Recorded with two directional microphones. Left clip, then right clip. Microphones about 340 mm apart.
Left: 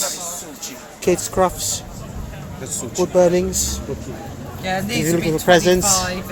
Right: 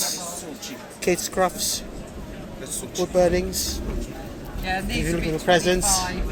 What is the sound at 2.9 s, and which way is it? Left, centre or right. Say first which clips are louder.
Speech: left 5 dB; centre.